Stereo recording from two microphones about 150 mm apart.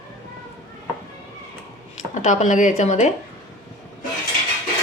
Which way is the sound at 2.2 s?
55° left (ahead or behind).